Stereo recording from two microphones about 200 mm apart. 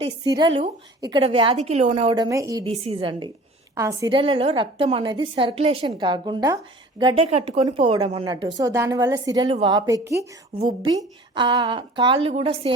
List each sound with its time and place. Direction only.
0.3 s a woman's voice: 25° right (ahead or behind)
2.6 s a woman's voice: 30° right (ahead or behind)
10.9 s a woman's voice: 25° right (ahead or behind)